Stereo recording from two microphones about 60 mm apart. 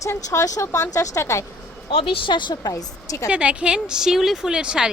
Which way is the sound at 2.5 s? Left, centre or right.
Left.